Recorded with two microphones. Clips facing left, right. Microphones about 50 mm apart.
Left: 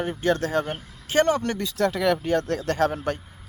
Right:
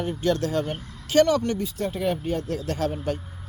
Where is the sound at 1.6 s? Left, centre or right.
Left.